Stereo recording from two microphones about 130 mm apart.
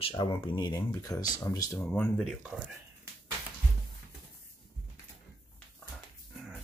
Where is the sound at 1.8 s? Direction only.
10° left (ahead or behind).